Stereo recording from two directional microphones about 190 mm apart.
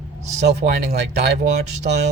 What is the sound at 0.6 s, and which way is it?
Speech, 40° right (ahead or behind).